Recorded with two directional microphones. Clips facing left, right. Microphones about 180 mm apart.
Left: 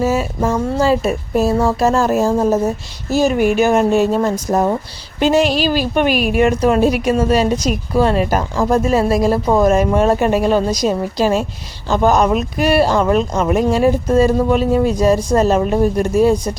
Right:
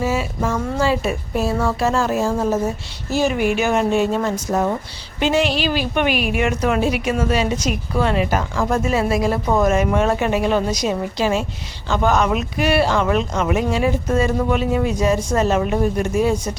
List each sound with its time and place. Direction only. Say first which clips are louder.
0.0 s a woman's voice: left 4 dB; 40° left (ahead or behind)